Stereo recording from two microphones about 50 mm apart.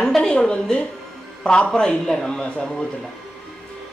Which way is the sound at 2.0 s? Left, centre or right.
Centre.